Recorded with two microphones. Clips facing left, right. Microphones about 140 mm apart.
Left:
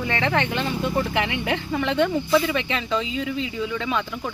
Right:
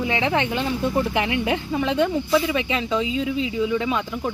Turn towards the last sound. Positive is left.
turn(degrees=-15)  # may be behind; listen again after turning